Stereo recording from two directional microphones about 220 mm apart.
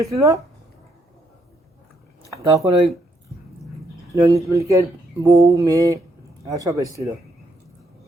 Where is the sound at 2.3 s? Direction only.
15° right (ahead or behind).